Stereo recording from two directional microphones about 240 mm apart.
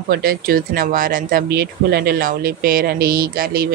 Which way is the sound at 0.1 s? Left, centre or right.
Right.